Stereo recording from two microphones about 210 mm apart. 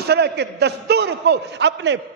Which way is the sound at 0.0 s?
50° right (ahead or behind).